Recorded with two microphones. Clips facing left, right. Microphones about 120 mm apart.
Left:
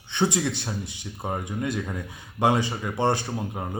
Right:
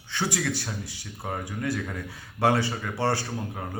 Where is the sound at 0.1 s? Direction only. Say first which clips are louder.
Left 4 dB; 20° left (ahead or behind).